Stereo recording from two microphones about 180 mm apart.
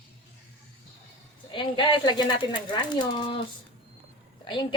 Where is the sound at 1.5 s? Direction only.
25° left (ahead or behind).